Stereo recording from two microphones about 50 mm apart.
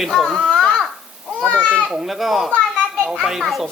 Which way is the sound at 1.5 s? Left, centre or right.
Left.